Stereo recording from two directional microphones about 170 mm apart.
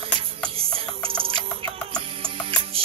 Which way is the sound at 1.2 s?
30° right (ahead or behind).